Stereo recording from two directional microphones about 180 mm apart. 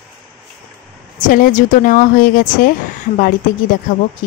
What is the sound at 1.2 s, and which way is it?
A woman's voice, 50° left (ahead or behind).